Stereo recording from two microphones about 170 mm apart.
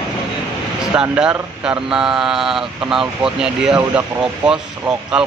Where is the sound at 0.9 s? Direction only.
5° right (ahead or behind).